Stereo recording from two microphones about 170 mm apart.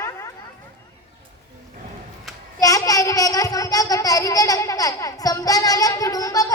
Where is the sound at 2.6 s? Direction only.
20° left (ahead or behind).